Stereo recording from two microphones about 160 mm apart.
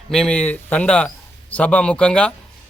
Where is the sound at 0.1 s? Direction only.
5° left (ahead or behind).